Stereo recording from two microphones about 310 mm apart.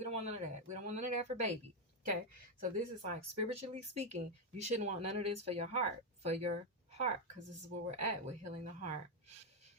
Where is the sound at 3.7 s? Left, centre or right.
Right.